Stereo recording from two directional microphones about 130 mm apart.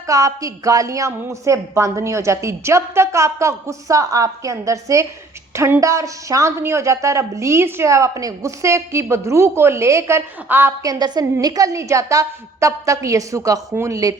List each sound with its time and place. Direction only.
0.1 s speech: 25° right (ahead or behind)
10.9 s speech: 30° right (ahead or behind)